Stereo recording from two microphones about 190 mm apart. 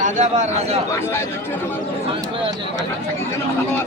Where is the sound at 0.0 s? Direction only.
40° right (ahead or behind).